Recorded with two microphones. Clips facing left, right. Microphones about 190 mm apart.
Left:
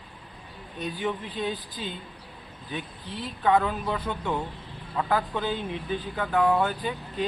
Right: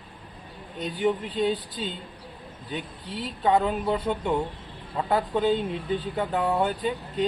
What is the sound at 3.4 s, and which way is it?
Speech, 20° right (ahead or behind).